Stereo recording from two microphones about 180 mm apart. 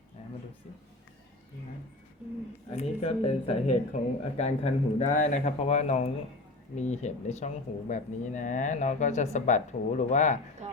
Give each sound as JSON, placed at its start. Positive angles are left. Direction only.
{"t": 0.2, "sound": "a sound", "side_deg": 35}
{"t": 2.6, "sound": "speech", "side_deg": 35}
{"t": 10.6, "sound": "speech", "side_deg": -35}